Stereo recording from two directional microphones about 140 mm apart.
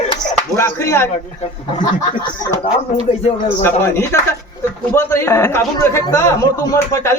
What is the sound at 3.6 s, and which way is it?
A man's voice, 15° left (ahead or behind).